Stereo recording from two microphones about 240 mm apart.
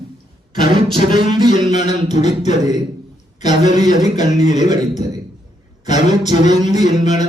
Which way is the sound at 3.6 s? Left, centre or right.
Left.